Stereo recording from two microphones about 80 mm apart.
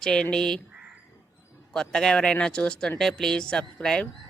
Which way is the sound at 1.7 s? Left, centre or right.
Centre.